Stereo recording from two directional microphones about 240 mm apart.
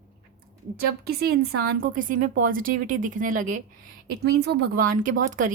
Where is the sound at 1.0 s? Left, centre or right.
Right.